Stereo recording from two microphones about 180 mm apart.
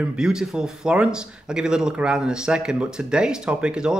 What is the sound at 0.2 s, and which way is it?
Speech, 5° right (ahead or behind).